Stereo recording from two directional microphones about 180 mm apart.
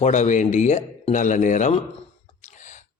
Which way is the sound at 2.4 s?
40° left (ahead or behind).